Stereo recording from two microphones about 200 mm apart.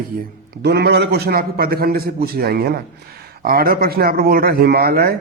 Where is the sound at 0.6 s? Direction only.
55° right (ahead or behind).